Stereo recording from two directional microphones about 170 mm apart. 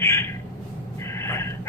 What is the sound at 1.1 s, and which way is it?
Gasp, 15° left (ahead or behind).